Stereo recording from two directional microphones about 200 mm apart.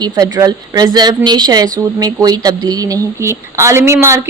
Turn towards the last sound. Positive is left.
turn(degrees=-15)  # may be behind; listen again after turning